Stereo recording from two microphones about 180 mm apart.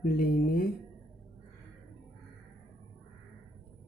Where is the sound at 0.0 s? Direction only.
55° left (ahead or behind).